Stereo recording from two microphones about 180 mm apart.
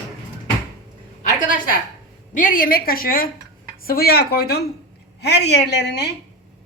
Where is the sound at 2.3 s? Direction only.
45° left (ahead or behind).